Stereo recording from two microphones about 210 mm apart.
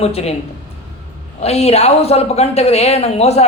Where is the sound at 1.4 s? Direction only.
30° left (ahead or behind).